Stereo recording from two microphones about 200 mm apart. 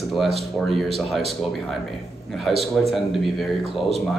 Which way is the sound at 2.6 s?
Centre (ahead or behind).